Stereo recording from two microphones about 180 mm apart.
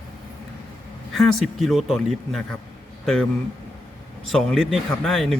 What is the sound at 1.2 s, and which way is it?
A man's voice, centre (ahead or behind).